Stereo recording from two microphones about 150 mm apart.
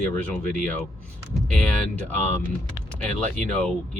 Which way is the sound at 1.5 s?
5° left (ahead or behind).